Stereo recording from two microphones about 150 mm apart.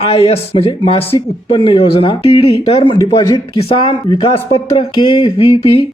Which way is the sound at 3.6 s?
40° left (ahead or behind).